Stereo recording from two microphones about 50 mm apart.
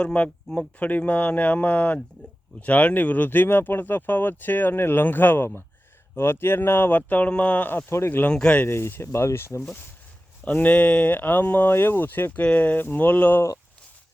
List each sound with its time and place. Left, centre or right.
0.0 s speech: left
7.3 s speech: left
7.7 s speech: left
8.3 s speech: centre
8.6 s speech: left
10.4 s speech: left
11.7 s speech: left
12.4 s speech: left